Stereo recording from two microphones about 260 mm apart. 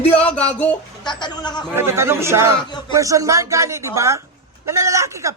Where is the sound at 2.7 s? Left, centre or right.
Centre.